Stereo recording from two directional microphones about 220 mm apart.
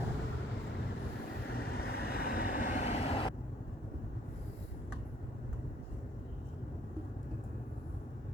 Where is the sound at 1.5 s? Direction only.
45° left (ahead or behind); by 3.3 s 25° left (ahead or behind).